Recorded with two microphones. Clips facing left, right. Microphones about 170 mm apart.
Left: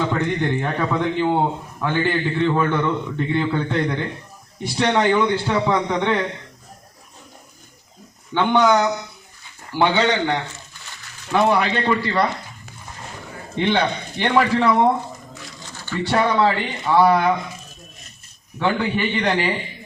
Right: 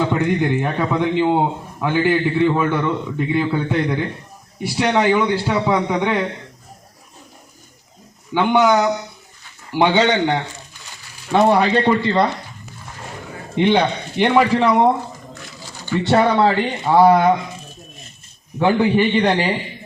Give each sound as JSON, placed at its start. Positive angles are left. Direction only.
{"t": 0.1, "sound": "a man's voice", "side_deg": -10}
{"t": 8.3, "sound": "a man's voice", "side_deg": -10}
{"t": 13.6, "sound": "a man's voice", "side_deg": -15}
{"t": 15.6, "sound": "a sound", "side_deg": -15}
{"t": 16.1, "sound": "a man's voice", "side_deg": -30}
{"t": 18.8, "sound": "a man's voice", "side_deg": -35}